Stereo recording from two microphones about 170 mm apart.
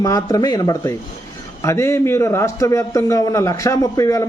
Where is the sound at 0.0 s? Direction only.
20° left (ahead or behind).